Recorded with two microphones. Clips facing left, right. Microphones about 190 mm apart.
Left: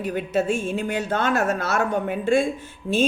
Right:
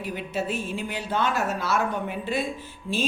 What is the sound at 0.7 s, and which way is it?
Speech, 50° left (ahead or behind).